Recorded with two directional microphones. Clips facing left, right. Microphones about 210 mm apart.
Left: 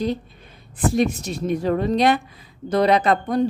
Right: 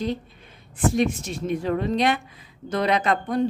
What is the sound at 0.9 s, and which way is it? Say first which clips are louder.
A woman's voice: left 2 dB; 35° left (ahead or behind).